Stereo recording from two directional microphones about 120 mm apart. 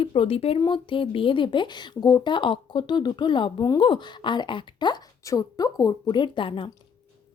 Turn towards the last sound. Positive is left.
turn(degrees=45)  # may be behind; listen again after turning